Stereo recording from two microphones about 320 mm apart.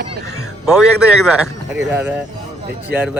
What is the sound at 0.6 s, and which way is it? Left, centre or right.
A man's voice, centre.